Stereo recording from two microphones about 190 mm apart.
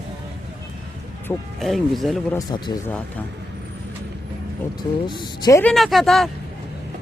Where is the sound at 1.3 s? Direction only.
10° left (ahead or behind).